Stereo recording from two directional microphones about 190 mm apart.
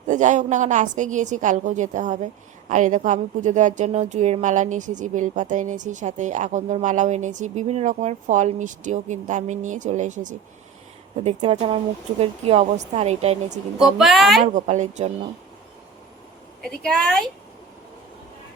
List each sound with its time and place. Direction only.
0.1 s a woman's voice: 40° right (ahead or behind)
14.0 s speech: centre (ahead or behind)
14.4 s a woman's voice: 40° right (ahead or behind)
16.8 s speech: 5° left (ahead or behind)